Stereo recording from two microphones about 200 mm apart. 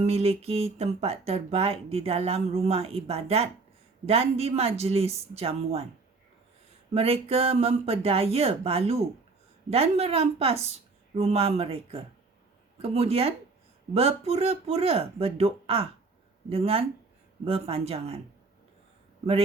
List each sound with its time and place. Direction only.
0.0 s speech: 30° right (ahead or behind)
6.9 s speech: 30° right (ahead or behind)